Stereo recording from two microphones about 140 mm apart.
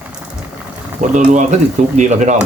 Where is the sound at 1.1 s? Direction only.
60° right (ahead or behind).